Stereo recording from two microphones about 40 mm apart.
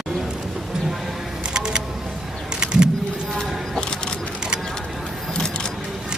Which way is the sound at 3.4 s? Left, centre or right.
Centre.